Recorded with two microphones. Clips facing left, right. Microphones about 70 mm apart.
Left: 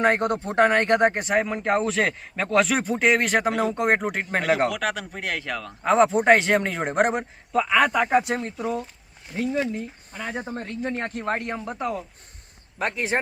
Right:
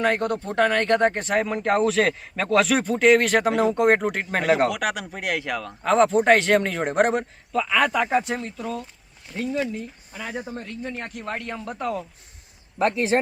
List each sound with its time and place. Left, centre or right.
0.0 s speech: left
1.2 s speech: centre
4.7 s speech: centre
5.8 s a man's voice: centre
7.5 s speech: centre
7.8 s speech: centre
8.5 s a man's voice: centre
10.1 s speech: centre
10.3 s speech: left; by 11.9 s centre